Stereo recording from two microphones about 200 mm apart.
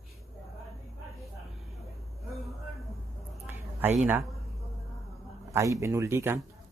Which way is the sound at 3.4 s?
10° right (ahead or behind).